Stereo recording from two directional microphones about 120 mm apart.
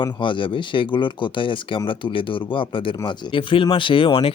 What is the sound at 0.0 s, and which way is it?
Speech, 45° left (ahead or behind).